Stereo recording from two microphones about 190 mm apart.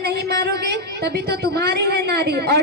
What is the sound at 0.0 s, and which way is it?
A woman's voice, 60° right (ahead or behind).